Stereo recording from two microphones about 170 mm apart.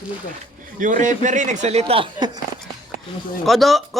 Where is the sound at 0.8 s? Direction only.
50° right (ahead or behind); by 2.3 s 30° right (ahead or behind).